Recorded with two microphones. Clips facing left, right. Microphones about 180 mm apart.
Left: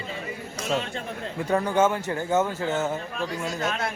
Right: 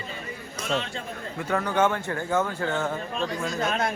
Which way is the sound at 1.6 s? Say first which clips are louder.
Left 1 dB; 10° left (ahead or behind).